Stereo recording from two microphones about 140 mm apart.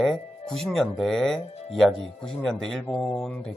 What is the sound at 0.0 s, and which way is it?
Speech, 5° left (ahead or behind).